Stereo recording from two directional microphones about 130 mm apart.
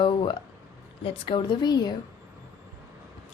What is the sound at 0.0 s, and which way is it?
A woman's voice, 40° left (ahead or behind).